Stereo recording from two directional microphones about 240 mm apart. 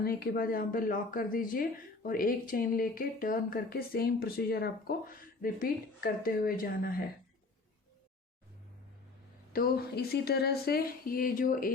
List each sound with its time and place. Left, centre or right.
0.0 s speech: left
9.5 s speech: left